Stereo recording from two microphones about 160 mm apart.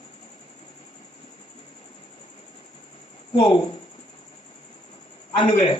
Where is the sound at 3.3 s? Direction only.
30° left (ahead or behind).